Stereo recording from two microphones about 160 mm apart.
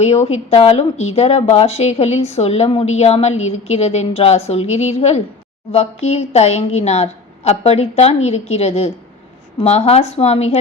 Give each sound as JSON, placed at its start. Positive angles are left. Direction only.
{"t": 0.0, "sound": "a woman's voice", "side_deg": 40}